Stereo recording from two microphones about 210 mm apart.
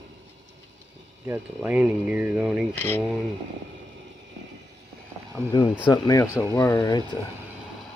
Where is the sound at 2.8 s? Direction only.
10° left (ahead or behind).